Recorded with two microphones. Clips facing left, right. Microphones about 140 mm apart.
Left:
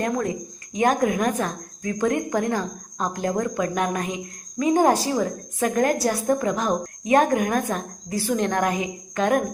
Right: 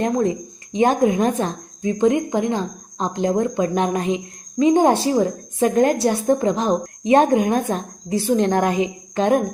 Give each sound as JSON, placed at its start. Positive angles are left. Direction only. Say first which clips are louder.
{"t": 0.0, "sound": "a woman's voice", "louder": "right 5 dB", "side_deg": -25}